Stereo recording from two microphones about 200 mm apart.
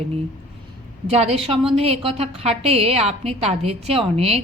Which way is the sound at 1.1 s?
30° right (ahead or behind).